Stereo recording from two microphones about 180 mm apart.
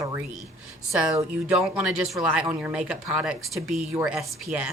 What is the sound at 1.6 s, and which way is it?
Speech, 5° right (ahead or behind).